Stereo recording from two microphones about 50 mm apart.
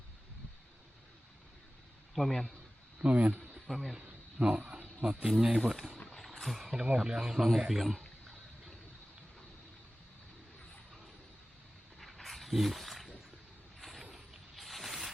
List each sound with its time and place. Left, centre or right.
2.1 s a man's voice: centre
3.0 s speech: right
3.7 s speech: centre
4.0 s speech: right
5.7 s speech: centre
6.0 s a sound: centre
6.2 s a sound: centre
6.8 s speech: centre
11.9 s wild animals: centre
13.7 s vehicle: centre
14.0 s a sound: centre